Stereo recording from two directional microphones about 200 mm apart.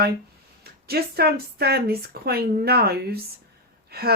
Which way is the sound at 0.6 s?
50° right (ahead or behind).